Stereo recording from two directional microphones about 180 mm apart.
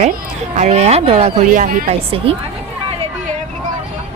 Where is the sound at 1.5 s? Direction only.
45° right (ahead or behind).